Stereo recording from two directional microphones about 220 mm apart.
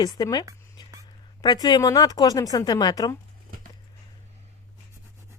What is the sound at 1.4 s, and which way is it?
Speech, 20° left (ahead or behind).